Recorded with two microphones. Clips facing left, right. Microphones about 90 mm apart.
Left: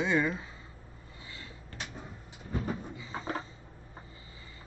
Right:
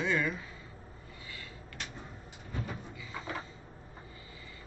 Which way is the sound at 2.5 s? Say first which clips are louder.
Left 6 dB; 30° left (ahead or behind).